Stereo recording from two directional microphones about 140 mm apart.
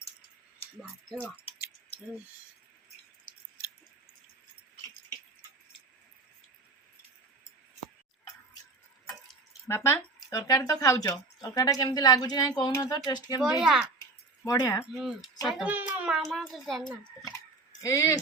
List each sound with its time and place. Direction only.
9.6 s speech: 20° left (ahead or behind)
13.4 s a child's voice: 5° right (ahead or behind)
14.4 s speech: 25° left (ahead or behind)
14.9 s a child's voice: centre (ahead or behind)
17.7 s speech: 20° left (ahead or behind)